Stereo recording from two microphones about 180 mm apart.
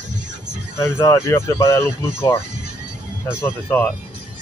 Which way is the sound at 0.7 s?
15° left (ahead or behind).